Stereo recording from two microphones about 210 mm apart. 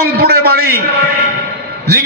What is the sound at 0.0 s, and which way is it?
Speech, 45° right (ahead or behind).